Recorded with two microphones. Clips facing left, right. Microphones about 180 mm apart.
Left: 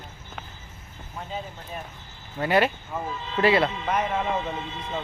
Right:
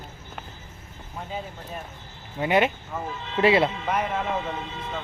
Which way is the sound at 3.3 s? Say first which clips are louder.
Right 1 dB; 25° right (ahead or behind).